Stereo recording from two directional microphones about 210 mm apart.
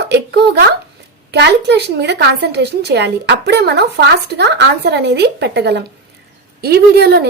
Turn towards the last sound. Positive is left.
turn(degrees=-50)  # may be behind; listen again after turning